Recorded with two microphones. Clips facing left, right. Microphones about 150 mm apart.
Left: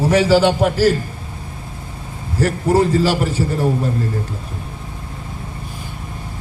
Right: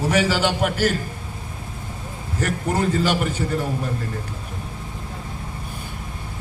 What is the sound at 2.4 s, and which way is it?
Speech, 35° left (ahead or behind).